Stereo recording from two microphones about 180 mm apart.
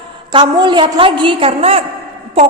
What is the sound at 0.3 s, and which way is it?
A woman's voice, 25° right (ahead or behind).